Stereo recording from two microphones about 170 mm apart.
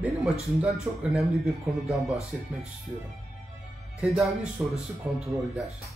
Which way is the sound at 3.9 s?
5° right (ahead or behind).